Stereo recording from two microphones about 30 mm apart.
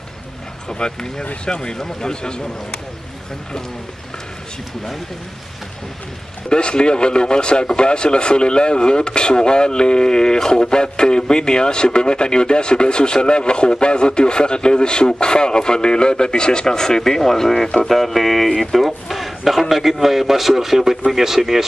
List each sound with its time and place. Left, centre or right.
0.7 s speech: left
6.5 s a man's voice: left; by 21.6 s centre